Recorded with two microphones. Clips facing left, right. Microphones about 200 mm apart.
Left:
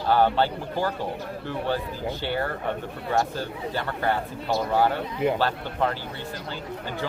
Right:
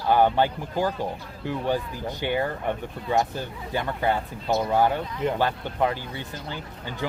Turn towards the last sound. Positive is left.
turn(degrees=-15)  # may be behind; listen again after turning